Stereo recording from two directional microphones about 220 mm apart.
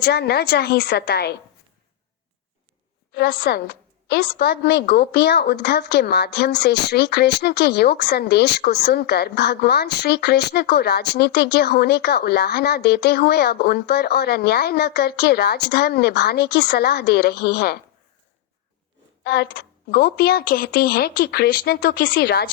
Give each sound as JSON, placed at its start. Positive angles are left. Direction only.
{"t": 0.0, "sound": "a woman's voice", "side_deg": 45}
{"t": 3.1, "sound": "a woman's voice", "side_deg": 50}
{"t": 19.2, "sound": "a woman's voice", "side_deg": 50}